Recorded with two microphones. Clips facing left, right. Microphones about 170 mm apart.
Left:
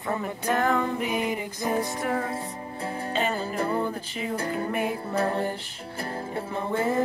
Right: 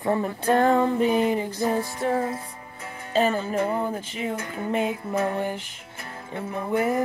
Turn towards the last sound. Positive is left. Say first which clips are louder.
# right 2 dB
turn(degrees=25)  # may be behind; listen again after turning